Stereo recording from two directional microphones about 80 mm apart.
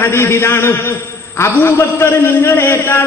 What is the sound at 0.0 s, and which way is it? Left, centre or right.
A man's voice, left.